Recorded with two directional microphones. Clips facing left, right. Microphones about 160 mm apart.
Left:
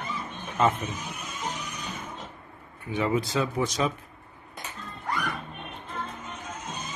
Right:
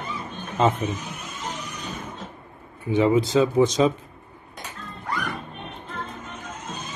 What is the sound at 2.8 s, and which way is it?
Speech, 25° right (ahead or behind).